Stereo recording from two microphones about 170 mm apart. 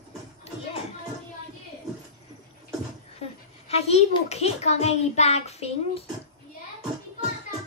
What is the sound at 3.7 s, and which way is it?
A child's voice, 40° left (ahead or behind).